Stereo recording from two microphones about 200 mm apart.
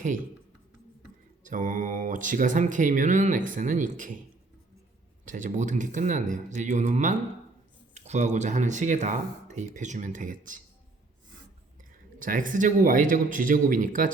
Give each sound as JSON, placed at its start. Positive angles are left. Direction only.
{"t": 1.5, "sound": "speech", "side_deg": -40}
{"t": 5.2, "sound": "speech", "side_deg": -40}
{"t": 12.2, "sound": "speech", "side_deg": -40}